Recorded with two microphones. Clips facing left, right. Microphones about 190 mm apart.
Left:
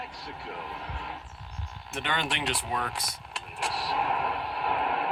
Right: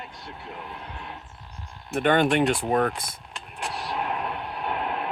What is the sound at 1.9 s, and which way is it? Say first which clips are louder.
Speech: right 12 dB; 50° right (ahead or behind).